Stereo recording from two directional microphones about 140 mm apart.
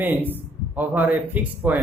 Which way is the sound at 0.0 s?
15° right (ahead or behind).